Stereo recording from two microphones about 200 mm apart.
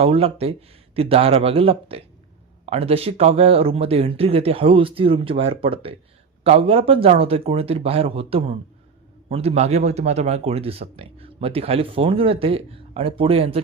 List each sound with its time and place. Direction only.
0.0 s speech: 30° right (ahead or behind)